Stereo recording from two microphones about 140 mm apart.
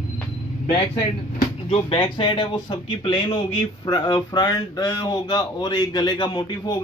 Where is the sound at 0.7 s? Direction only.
45° left (ahead or behind).